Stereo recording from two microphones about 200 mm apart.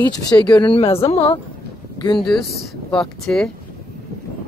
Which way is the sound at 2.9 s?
5° left (ahead or behind).